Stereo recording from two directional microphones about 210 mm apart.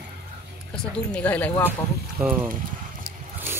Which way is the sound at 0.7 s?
5° left (ahead or behind).